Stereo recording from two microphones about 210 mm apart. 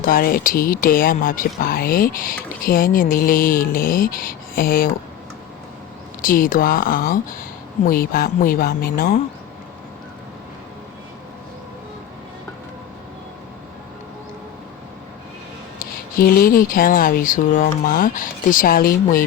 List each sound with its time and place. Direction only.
0.0 s speech: 45° left (ahead or behind)
6.2 s speech: 40° left (ahead or behind)
15.8 s speech: 45° left (ahead or behind)